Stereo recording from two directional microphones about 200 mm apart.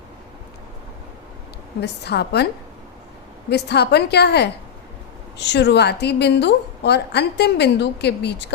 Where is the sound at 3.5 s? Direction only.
55° left (ahead or behind).